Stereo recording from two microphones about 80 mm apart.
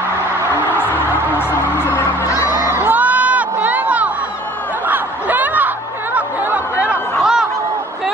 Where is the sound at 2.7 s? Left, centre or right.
Right.